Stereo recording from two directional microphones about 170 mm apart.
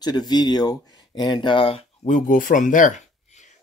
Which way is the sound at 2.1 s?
50° left (ahead or behind).